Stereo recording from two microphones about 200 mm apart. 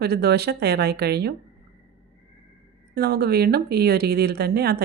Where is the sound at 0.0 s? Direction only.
55° right (ahead or behind).